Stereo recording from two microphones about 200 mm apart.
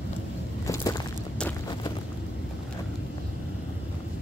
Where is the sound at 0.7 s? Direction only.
20° left (ahead or behind).